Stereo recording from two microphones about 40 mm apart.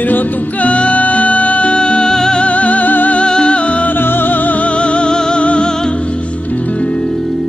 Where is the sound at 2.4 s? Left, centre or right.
Left.